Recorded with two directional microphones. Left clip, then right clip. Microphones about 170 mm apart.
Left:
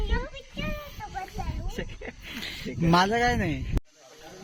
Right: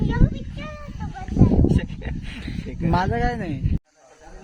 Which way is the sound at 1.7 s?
15° left (ahead or behind).